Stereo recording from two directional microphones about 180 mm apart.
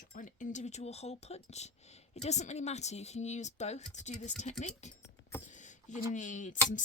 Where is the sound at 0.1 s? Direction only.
45° left (ahead or behind).